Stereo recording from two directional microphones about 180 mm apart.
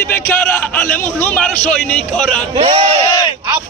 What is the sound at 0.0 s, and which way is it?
A man's voice, 10° left (ahead or behind).